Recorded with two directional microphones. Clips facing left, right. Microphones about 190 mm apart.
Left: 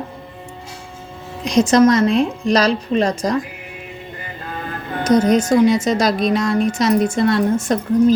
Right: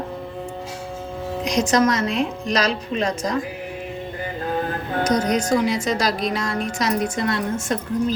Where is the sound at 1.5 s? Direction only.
25° left (ahead or behind).